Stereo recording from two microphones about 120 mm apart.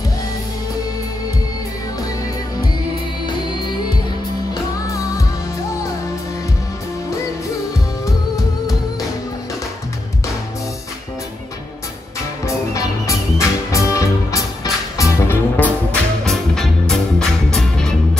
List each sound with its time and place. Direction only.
3.3 s music: 40° left (ahead or behind)
4.8 s music: 30° left (ahead or behind)
12.4 s music: 25° left (ahead or behind)
15.5 s music: 15° left (ahead or behind)
16.3 s music: 5° left (ahead or behind)